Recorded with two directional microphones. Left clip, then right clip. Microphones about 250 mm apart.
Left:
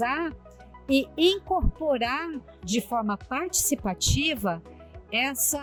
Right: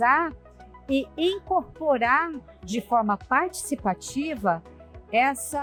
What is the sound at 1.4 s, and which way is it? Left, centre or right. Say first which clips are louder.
Speech: right 2 dB; centre.